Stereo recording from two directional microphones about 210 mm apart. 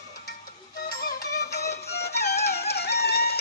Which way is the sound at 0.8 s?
50° left (ahead or behind).